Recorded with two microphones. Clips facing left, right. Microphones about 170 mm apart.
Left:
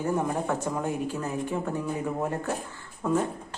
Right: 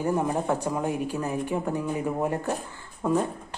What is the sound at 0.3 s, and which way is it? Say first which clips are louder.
A woman's voice: right 2 dB; 15° right (ahead or behind).